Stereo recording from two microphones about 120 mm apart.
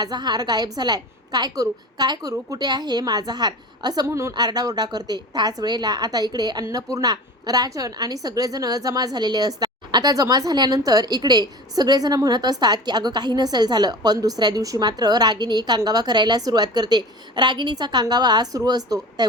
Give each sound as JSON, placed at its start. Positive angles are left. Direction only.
{"t": 0.0, "sound": "a woman's voice", "side_deg": -35}